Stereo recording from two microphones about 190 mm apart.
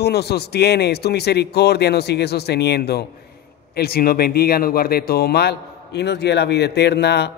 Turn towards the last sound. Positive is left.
turn(degrees=60)  # may be behind; listen again after turning